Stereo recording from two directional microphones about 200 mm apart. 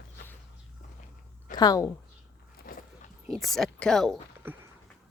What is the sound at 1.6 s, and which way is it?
Speech, 20° left (ahead or behind).